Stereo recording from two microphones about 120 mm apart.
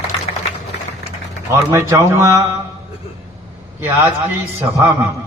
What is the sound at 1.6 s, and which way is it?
A man's voice, 25° right (ahead or behind).